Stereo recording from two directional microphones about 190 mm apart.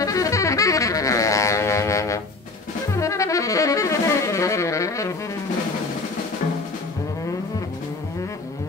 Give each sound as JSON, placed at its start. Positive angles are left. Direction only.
{"t": 0.0, "sound": "music", "side_deg": 15}
{"t": 2.9, "sound": "saxophone", "side_deg": 15}